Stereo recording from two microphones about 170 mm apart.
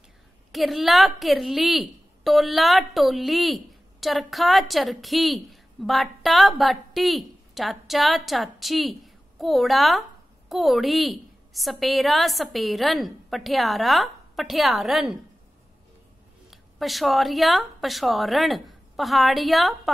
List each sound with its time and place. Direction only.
0.5 s speech: centre (ahead or behind)
16.4 s a woman's voice: centre (ahead or behind)